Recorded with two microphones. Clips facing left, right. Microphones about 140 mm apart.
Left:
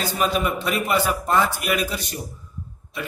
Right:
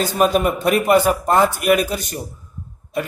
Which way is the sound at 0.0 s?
45° right (ahead or behind).